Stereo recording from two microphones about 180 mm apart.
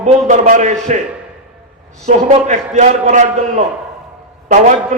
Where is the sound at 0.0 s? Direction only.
45° right (ahead or behind).